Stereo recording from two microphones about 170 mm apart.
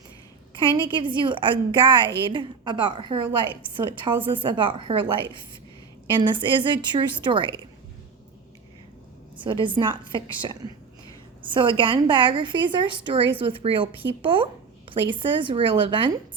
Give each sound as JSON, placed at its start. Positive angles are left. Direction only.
{"t": 0.9, "sound": "a woman's voice", "side_deg": -30}
{"t": 9.4, "sound": "a woman's voice", "side_deg": -30}
{"t": 14.2, "sound": "a sound", "side_deg": -30}
{"t": 15.1, "sound": "a woman's voice", "side_deg": -30}